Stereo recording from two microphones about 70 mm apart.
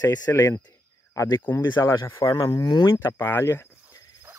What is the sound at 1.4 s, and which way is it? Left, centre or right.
Speech, left.